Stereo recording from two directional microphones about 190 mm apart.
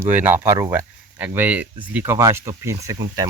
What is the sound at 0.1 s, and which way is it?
Speech, 10° right (ahead or behind).